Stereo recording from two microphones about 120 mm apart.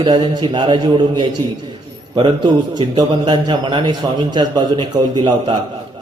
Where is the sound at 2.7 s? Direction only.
40° right (ahead or behind).